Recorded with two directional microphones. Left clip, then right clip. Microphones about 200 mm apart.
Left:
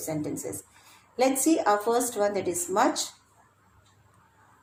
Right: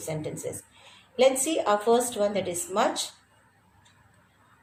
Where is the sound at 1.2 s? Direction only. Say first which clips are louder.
Right 1 dB; 35° left (ahead or behind).